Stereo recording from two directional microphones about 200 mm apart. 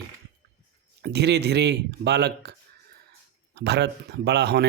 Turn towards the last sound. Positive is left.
turn(degrees=-55)  # may be behind; listen again after turning